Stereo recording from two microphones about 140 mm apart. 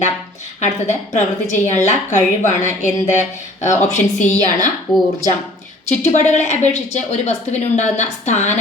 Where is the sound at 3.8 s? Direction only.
55° left (ahead or behind).